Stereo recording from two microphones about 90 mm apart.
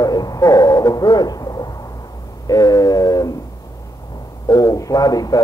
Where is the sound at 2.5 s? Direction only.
45° left (ahead or behind).